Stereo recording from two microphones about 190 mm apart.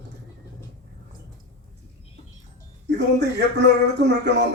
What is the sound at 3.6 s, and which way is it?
Speech, 65° right (ahead or behind).